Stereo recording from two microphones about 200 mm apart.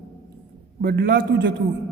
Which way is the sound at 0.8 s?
50° right (ahead or behind).